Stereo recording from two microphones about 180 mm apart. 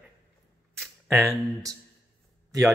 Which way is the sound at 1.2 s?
15° right (ahead or behind).